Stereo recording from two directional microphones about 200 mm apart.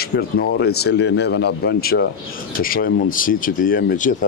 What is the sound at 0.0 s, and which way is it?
Speech, 50° left (ahead or behind).